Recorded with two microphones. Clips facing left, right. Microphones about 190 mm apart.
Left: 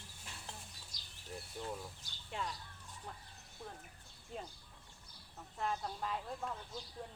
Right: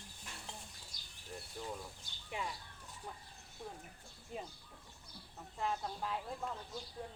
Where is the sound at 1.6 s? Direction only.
Centre (ahead or behind).